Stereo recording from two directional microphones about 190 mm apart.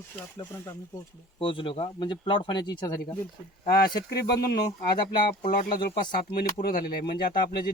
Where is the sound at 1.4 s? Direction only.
25° left (ahead or behind).